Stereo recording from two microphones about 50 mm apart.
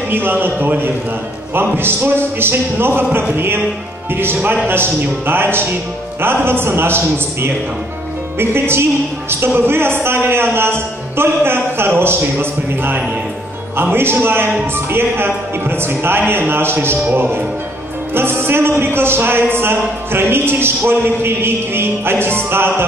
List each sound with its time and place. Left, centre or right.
0.1 s a man's voice: right
17.0 s a man's voice: right
18.1 s a man's voice: right